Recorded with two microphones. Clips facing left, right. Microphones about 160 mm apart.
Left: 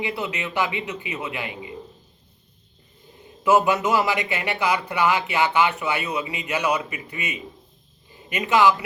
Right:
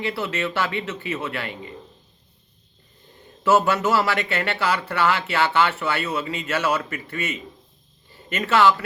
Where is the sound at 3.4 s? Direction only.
15° left (ahead or behind).